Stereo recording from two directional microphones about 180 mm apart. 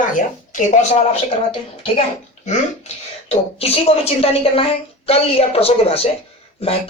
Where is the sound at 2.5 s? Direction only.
35° left (ahead or behind).